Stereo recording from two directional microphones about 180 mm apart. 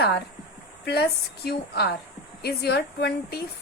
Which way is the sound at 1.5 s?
60° left (ahead or behind).